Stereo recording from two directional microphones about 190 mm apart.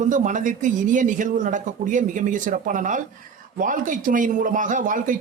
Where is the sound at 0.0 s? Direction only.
40° right (ahead or behind).